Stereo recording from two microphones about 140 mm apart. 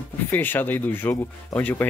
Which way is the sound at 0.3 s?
15° left (ahead or behind).